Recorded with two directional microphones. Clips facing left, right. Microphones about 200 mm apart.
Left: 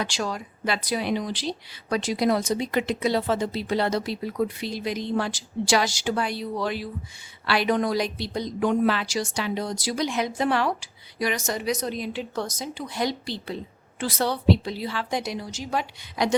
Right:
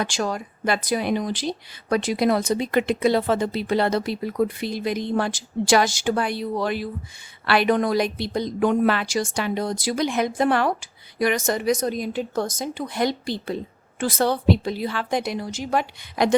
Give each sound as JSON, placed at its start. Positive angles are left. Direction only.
{"t": 0.0, "sound": "speech", "side_deg": -50}